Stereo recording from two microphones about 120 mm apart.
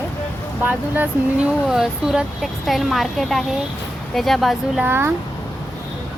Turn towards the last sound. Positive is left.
turn(degrees=-20)  # may be behind; listen again after turning